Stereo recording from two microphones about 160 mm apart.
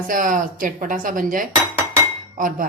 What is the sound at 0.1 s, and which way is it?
Speech, 55° right (ahead or behind).